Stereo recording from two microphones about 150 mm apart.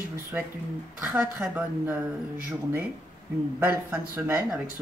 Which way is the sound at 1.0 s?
10° right (ahead or behind).